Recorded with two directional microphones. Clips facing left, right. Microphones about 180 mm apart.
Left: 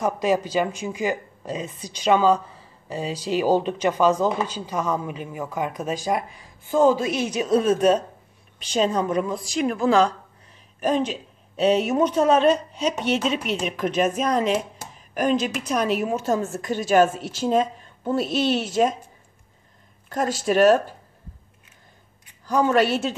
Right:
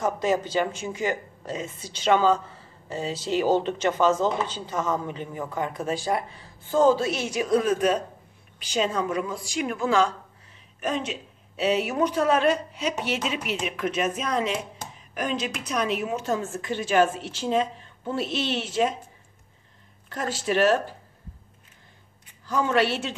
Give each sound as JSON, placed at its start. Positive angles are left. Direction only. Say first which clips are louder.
{"t": 0.0, "sound": "a woman's voice", "louder": "left 2 dB", "side_deg": 15}
{"t": 11.9, "sound": "speech", "louder": "left 4 dB", "side_deg": 25}
{"t": 13.6, "sound": "a woman's voice", "louder": "left 4 dB", "side_deg": 35}
{"t": 20.1, "sound": "a woman's voice", "louder": "left 4 dB", "side_deg": 40}
{"t": 22.5, "sound": "a woman's voice", "louder": "left 4 dB", "side_deg": 40}